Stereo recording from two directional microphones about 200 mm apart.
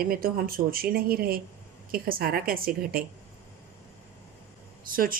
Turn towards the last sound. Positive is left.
turn(degrees=-45)  # may be behind; listen again after turning